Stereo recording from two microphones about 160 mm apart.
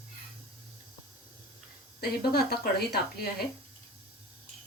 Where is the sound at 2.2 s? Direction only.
70° left (ahead or behind).